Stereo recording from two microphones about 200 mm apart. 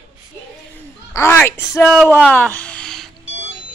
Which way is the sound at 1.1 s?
10° left (ahead or behind).